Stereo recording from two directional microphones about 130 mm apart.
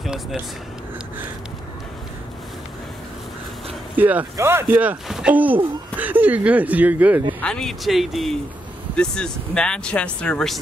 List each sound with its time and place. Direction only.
0.0 s speech: centre (ahead or behind)
3.9 s speech: 15° right (ahead or behind)
7.4 s speech: 5° left (ahead or behind)